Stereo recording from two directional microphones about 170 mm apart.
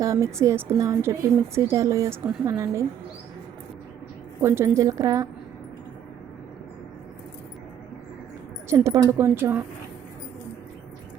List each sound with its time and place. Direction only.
0.0 s a woman's voice: 20° right (ahead or behind)
4.4 s a woman's voice: 15° right (ahead or behind)
8.7 s a woman's voice: 15° right (ahead or behind)